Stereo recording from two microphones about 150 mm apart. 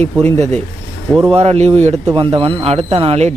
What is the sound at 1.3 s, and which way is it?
Speech, 45° right (ahead or behind).